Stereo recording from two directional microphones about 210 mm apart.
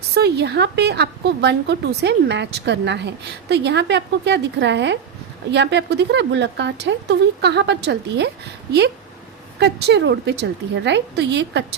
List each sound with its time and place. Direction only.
0.1 s a woman's voice: 50° right (ahead or behind)
9.6 s speech: 55° right (ahead or behind)